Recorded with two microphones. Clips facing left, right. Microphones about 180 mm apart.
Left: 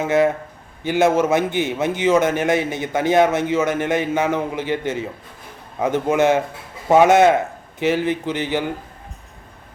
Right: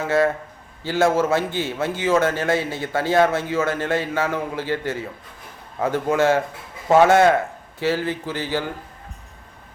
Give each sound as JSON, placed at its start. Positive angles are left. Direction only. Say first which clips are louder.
{"t": 0.0, "sound": "a man's voice", "louder": "left 2 dB", "side_deg": 20}